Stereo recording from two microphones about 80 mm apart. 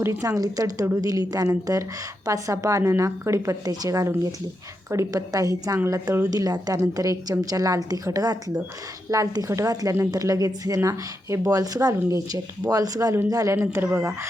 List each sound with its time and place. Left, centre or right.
0.2 s speech: right
4.9 s speech: right
5.3 s speech: right
13.7 s speech: right